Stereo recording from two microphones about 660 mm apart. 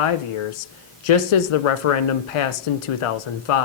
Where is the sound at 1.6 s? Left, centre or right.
Left.